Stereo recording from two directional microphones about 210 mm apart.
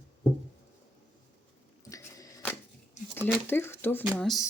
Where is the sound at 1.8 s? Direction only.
15° left (ahead or behind).